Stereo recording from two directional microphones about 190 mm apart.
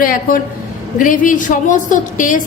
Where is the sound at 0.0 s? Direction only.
45° left (ahead or behind).